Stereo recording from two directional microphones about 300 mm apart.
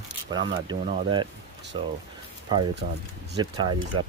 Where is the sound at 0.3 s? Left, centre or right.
Centre.